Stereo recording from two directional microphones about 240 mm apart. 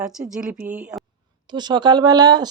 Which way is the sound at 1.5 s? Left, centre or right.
Centre.